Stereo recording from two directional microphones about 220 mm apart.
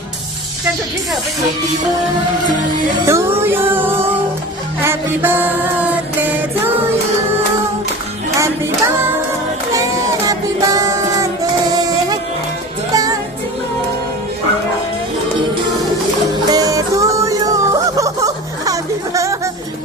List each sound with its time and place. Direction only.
3.1 s music: 10° right (ahead or behind)
4.9 s mantra: 10° right (ahead or behind)
8.4 s music: 15° right (ahead or behind)
10.2 s music: 15° right (ahead or behind)
16.5 s music: 15° right (ahead or behind)